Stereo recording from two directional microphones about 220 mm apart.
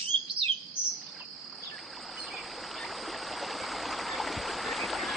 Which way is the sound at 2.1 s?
Centre (ahead or behind).